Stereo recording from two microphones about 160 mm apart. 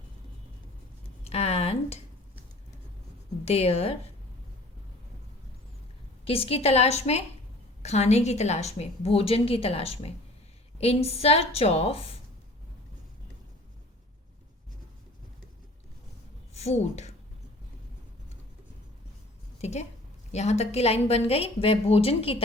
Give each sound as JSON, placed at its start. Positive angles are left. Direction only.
{"t": 1.2, "sound": "speech", "side_deg": 40}
{"t": 3.4, "sound": "a woman's voice", "side_deg": 40}
{"t": 6.2, "sound": "a woman's voice", "side_deg": 35}
{"t": 16.6, "sound": "speech", "side_deg": 45}
{"t": 19.6, "sound": "a woman's voice", "side_deg": 45}